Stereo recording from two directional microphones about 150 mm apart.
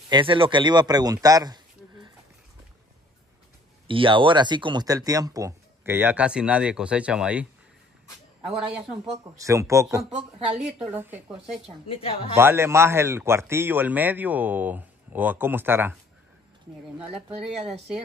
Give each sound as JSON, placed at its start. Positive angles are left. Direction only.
{"t": 0.1, "sound": "speech", "side_deg": -35}
{"t": 3.8, "sound": "speech", "side_deg": -35}
{"t": 8.5, "sound": "a man's voice", "side_deg": -5}
{"t": 9.2, "sound": "a man's voice", "side_deg": -20}
{"t": 11.9, "sound": "a woman's voice", "side_deg": 40}
{"t": 12.4, "sound": "a man's voice", "side_deg": -15}
{"t": 17.0, "sound": "speech", "side_deg": -40}